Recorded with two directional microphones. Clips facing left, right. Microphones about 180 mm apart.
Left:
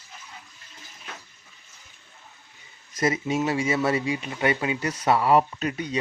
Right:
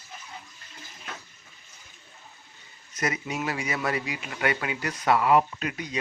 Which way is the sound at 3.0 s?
25° left (ahead or behind).